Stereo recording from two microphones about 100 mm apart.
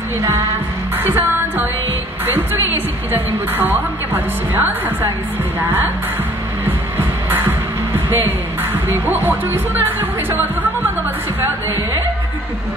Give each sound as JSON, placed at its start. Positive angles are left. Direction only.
{"t": 0.9, "sound": "music", "side_deg": -20}
{"t": 2.2, "sound": "a woman's voice", "side_deg": -20}
{"t": 7.2, "sound": "music", "side_deg": -20}
{"t": 9.1, "sound": "a woman's voice", "side_deg": -20}
{"t": 9.9, "sound": "music", "side_deg": -20}